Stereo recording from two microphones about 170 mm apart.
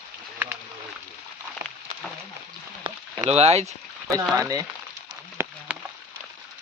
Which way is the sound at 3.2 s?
40° right (ahead or behind).